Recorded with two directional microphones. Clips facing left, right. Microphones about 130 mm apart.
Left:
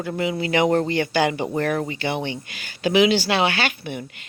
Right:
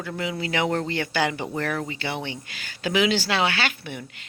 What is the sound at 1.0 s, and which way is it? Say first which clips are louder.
Speech: left 4 dB; 20° left (ahead or behind).